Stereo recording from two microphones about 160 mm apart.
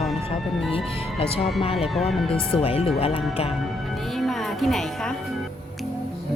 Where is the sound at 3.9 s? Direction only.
Centre (ahead or behind).